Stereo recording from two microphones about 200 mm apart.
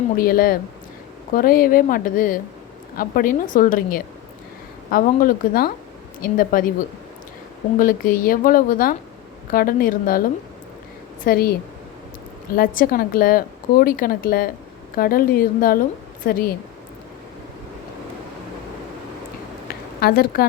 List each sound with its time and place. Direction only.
0.2 s a woman's voice: 45° left (ahead or behind)
7.8 s a woman's voice: 45° left (ahead or behind)
11.3 s a woman's voice: 50° left (ahead or behind)
12.5 s a woman's voice: 45° left (ahead or behind)
20.0 s a woman's voice: 50° left (ahead or behind)